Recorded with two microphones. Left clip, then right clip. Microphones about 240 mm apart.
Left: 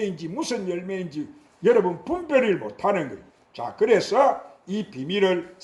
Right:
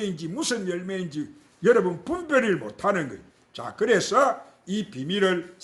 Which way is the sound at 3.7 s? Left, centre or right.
Right.